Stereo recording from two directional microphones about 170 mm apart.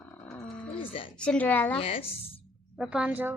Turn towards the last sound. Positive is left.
turn(degrees=-10)  # may be behind; listen again after turning